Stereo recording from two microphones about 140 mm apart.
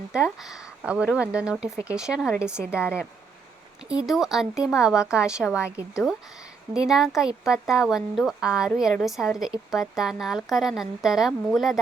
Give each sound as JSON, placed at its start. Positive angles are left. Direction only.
{"t": 0.1, "sound": "speech", "side_deg": -5}
{"t": 3.8, "sound": "speech", "side_deg": -5}